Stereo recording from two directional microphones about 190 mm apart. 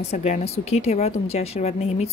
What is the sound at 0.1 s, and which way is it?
A woman's voice, 35° left (ahead or behind).